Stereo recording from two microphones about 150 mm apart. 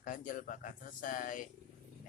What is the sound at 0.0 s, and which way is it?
Speech, 60° left (ahead or behind).